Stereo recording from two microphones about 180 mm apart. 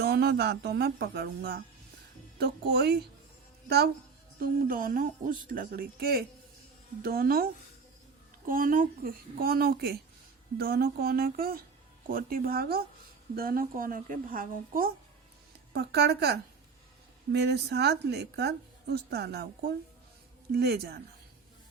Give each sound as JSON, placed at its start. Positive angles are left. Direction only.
{"t": 0.0, "sound": "speech", "side_deg": -60}
{"t": 2.4, "sound": "a woman's voice", "side_deg": -65}
{"t": 4.4, "sound": "speech", "side_deg": -50}
{"t": 15.7, "sound": "a woman's voice", "side_deg": -65}